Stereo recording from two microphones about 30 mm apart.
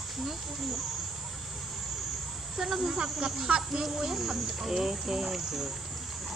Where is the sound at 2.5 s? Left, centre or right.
Centre.